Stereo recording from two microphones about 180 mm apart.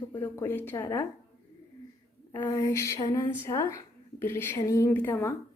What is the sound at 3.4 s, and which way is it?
A woman's voice, 15° left (ahead or behind).